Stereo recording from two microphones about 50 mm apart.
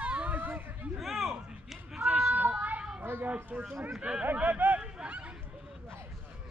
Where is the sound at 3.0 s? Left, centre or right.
Right.